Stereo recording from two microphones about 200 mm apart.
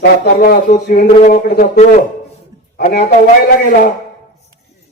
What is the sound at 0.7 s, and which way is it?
A man's voice, 40° left (ahead or behind).